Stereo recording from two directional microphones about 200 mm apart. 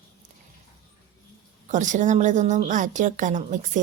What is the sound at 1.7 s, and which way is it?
Speech, 40° right (ahead or behind).